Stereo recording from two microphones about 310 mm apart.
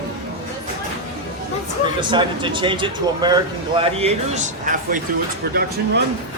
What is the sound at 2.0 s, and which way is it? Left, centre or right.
Speech, centre.